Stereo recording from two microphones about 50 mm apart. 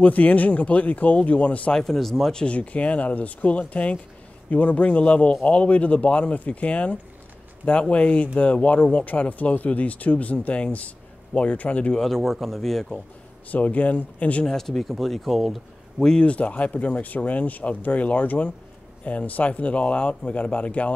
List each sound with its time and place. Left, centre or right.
0.0 s a man's voice: left
1.7 s speech: centre
2.3 s a man's voice: left
12.0 s speech: centre
13.5 s speech: left
14.4 s speech: centre
16.0 s speech: centre
16.3 s a man's voice: left